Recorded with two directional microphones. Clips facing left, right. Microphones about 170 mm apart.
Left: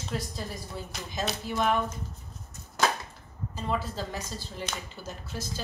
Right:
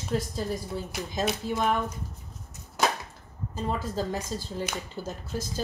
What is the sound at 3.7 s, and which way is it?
A woman's voice, 45° right (ahead or behind).